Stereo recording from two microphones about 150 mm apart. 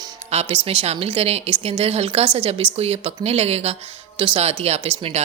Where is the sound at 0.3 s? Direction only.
40° right (ahead or behind).